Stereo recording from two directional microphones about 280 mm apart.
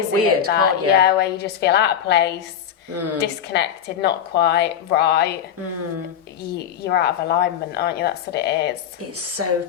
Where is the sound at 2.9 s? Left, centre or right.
Right.